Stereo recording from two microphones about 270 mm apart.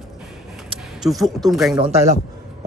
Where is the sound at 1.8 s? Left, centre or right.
Right.